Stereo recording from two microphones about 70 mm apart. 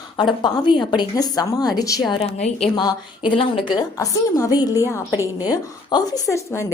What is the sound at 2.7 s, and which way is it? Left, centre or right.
A woman's voice, left.